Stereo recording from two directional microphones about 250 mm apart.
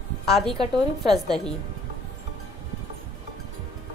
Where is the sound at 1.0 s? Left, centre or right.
Centre.